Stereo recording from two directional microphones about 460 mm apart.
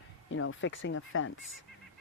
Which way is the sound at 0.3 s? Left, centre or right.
Left.